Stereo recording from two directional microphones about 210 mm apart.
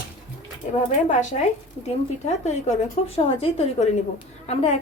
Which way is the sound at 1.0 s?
35° left (ahead or behind).